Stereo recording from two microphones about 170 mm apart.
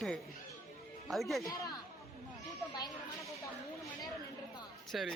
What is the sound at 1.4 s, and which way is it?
Speech, 20° left (ahead or behind).